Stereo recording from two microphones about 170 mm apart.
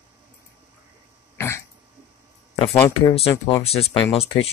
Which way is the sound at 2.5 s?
30° left (ahead or behind).